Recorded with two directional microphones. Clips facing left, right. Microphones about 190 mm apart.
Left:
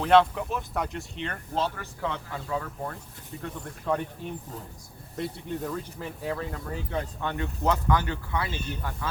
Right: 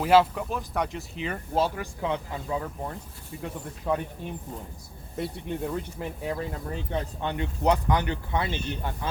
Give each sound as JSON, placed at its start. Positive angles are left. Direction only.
{"t": 0.0, "sound": "speech", "side_deg": -5}
{"t": 3.4, "sound": "speech", "side_deg": -10}
{"t": 5.1, "sound": "speech", "side_deg": -10}